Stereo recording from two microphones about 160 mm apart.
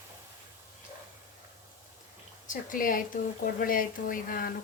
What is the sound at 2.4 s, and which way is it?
Speech, 55° left (ahead or behind).